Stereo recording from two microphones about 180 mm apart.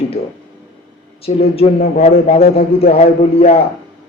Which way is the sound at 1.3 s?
35° left (ahead or behind).